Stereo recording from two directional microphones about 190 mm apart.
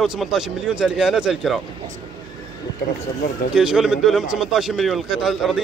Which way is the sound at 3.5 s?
5° right (ahead or behind).